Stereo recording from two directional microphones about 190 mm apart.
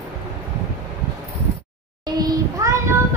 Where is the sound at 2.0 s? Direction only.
20° right (ahead or behind).